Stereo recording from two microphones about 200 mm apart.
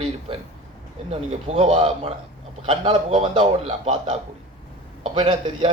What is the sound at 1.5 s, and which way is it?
Speech, 25° right (ahead or behind).